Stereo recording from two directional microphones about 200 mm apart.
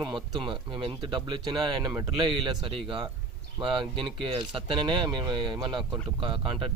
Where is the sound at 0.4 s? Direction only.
25° right (ahead or behind).